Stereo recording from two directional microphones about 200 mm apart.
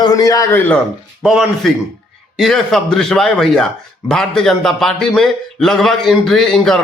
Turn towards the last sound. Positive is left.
turn(degrees=0)  # may be behind; listen again after turning